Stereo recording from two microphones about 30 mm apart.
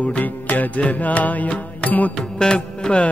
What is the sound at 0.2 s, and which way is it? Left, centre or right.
Music, left.